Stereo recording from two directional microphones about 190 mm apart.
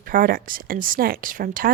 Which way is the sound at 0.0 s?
50° right (ahead or behind).